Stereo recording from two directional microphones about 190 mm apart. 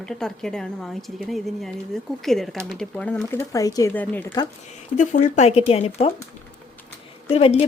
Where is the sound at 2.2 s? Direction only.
Centre (ahead or behind).